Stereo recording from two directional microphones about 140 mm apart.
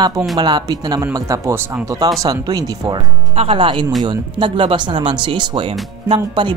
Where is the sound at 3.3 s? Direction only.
45° right (ahead or behind).